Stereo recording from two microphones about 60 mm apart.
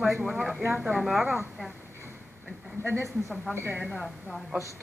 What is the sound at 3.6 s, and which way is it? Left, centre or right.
Speech, right.